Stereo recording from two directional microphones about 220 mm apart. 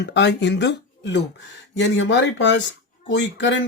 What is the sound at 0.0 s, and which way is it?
Speech, 55° left (ahead or behind).